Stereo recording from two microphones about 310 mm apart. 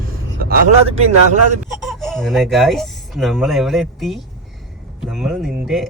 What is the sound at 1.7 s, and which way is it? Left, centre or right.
Speech, centre.